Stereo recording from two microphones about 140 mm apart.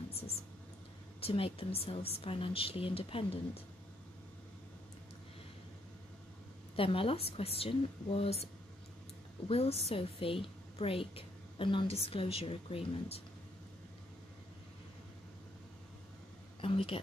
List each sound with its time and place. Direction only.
1.2 s a woman's voice: 40° left (ahead or behind)
6.8 s speech: 40° left (ahead or behind)
9.5 s a woman's voice: 45° left (ahead or behind)
16.6 s speech: 45° left (ahead or behind)